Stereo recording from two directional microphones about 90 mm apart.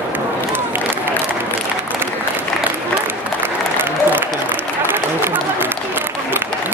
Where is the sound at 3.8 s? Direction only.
25° right (ahead or behind).